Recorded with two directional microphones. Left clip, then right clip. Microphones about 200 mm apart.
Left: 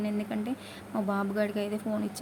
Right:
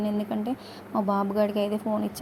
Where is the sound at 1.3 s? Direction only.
10° right (ahead or behind).